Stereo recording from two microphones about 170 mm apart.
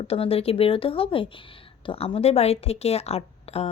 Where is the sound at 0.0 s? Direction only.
35° left (ahead or behind).